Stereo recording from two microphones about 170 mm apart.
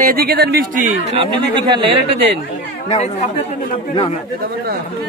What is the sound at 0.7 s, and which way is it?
Speech, 45° right (ahead or behind).